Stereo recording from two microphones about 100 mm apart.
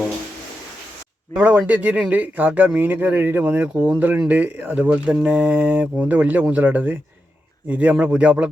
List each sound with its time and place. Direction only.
1.4 s speech: 15° right (ahead or behind)